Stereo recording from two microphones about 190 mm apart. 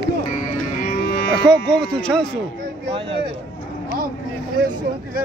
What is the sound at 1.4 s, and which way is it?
Speech, 5° left (ahead or behind).